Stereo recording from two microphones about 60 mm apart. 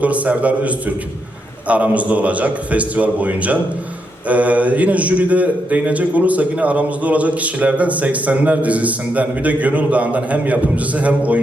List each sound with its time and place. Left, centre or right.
0.0 s a man's voice: right